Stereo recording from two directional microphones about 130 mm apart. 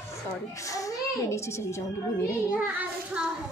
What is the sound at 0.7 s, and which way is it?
A child's voice, 25° left (ahead or behind).